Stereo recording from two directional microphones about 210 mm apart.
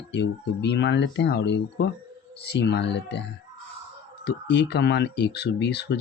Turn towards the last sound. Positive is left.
turn(degrees=55)  # may be behind; listen again after turning